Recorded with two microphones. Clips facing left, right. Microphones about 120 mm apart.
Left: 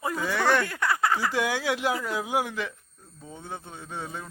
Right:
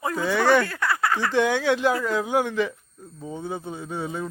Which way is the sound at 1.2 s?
10° left (ahead or behind).